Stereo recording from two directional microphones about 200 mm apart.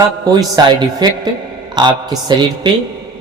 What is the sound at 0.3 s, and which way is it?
Mantra, 20° right (ahead or behind).